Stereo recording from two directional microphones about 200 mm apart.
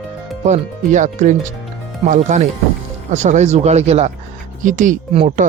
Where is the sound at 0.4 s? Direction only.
35° right (ahead or behind).